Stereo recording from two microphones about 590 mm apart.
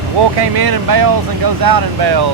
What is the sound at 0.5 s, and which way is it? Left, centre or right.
Speech, right.